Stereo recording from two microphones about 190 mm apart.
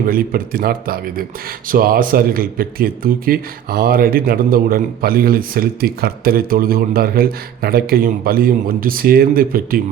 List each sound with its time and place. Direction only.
0.0 s speech: 50° right (ahead or behind)